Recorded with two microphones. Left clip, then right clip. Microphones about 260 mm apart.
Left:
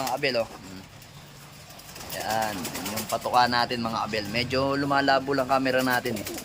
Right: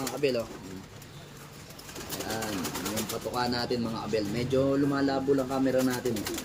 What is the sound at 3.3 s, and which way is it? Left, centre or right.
Speech, centre.